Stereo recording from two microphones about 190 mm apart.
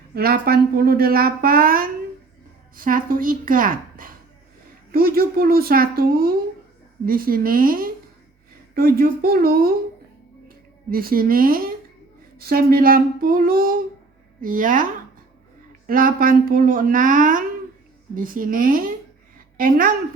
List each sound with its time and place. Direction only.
0.1 s a woman's voice: 55° right (ahead or behind)
15.9 s a woman's voice: 50° right (ahead or behind)